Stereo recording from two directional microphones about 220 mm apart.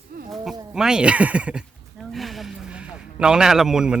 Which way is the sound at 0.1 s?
45° right (ahead or behind).